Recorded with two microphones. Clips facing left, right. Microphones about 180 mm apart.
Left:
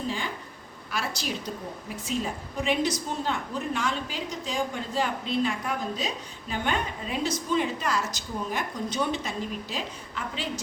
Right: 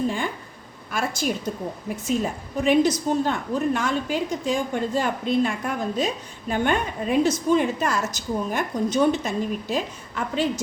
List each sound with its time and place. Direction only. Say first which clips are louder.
0.9 s a woman's voice: right 6 dB; 50° right (ahead or behind)
2.6 s a woman's voice: right 8 dB; 45° right (ahead or behind)